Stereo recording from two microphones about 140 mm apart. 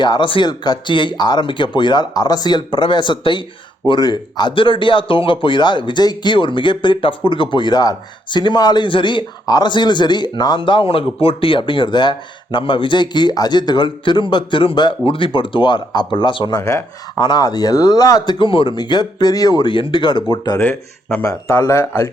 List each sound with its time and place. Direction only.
0.0 s speech: 35° left (ahead or behind)
16.6 s speech: 25° left (ahead or behind)
20.6 s speech: 15° left (ahead or behind)